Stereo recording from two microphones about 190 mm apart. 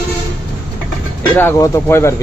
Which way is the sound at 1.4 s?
15° left (ahead or behind).